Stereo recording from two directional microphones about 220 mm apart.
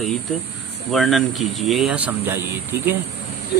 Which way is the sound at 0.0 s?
Centre (ahead or behind).